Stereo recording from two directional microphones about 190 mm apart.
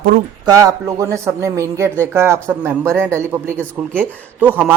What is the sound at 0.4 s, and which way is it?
Speech, 15° right (ahead or behind).